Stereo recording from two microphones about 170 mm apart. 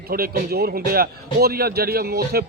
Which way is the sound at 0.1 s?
65° right (ahead or behind).